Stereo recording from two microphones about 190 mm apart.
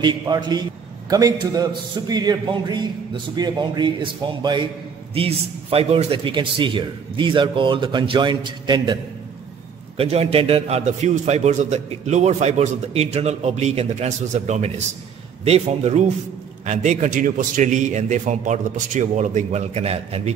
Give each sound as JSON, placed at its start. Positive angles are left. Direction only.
{"t": 0.0, "sound": "a man's voice", "side_deg": -20}
{"t": 9.9, "sound": "a man's voice", "side_deg": -30}